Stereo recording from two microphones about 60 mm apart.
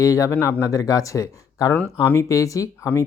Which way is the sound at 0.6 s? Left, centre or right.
Left.